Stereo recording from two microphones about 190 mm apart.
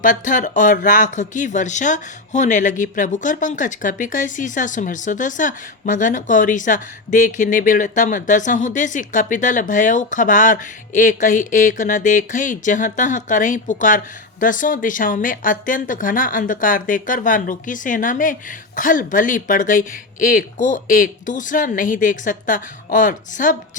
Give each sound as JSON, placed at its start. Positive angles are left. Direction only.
{"t": 0.0, "sound": "speech", "side_deg": 45}